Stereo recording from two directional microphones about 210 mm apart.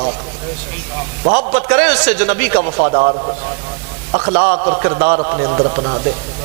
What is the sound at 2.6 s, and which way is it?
Speech, 30° right (ahead or behind).